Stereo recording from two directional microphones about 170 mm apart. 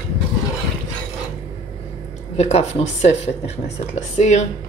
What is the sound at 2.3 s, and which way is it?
Speech, 40° left (ahead or behind).